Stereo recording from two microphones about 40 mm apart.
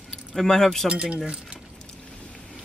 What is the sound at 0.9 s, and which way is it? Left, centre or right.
Speech, right.